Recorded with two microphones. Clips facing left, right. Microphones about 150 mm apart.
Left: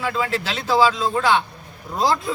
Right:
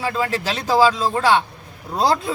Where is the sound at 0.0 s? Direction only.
35° right (ahead or behind).